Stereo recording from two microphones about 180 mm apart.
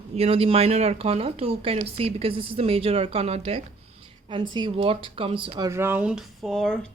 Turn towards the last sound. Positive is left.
turn(degrees=0)  # may be behind; listen again after turning